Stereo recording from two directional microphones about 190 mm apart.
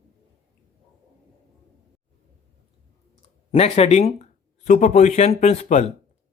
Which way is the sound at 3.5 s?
35° left (ahead or behind).